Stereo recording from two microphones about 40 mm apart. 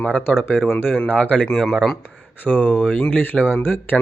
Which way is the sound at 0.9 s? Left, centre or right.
Left.